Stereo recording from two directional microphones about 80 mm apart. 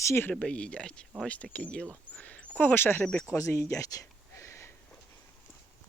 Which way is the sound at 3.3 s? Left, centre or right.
Left.